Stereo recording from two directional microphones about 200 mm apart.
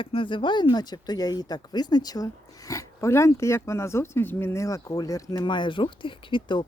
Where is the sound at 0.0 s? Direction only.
25° left (ahead or behind).